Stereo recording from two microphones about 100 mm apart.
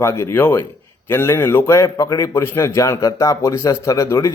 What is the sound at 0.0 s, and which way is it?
A man's voice, 30° left (ahead or behind).